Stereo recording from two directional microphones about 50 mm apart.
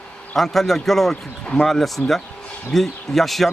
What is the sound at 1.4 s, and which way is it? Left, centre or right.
Speech, centre.